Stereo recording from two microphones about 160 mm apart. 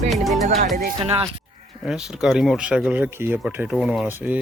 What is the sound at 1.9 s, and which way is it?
Speech, 5° right (ahead or behind).